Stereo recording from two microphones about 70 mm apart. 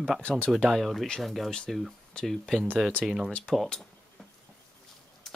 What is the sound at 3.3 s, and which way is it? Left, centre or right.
Speech, centre.